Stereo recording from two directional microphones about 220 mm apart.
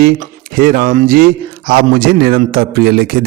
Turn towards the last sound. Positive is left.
turn(degrees=-45)  # may be behind; listen again after turning